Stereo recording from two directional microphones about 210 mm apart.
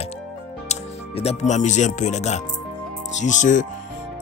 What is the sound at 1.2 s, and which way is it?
Speech, 30° left (ahead or behind).